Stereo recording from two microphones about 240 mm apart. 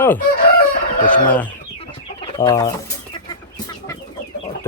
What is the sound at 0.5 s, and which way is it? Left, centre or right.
Chicken, left.